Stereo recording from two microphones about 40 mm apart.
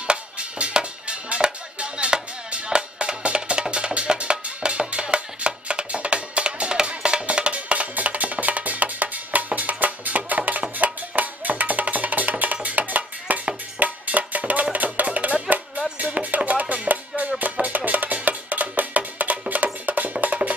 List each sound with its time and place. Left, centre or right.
0.0 s music: right